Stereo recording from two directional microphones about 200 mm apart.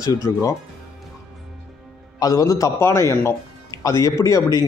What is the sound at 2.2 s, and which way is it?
A man's voice, 20° left (ahead or behind).